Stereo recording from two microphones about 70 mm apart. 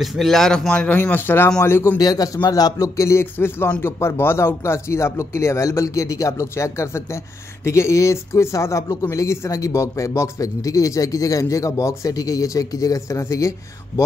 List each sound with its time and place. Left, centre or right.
0.0 s a man's voice: centre
0.7 s speech: left
2.0 s a man's voice: left
2.8 s speech: left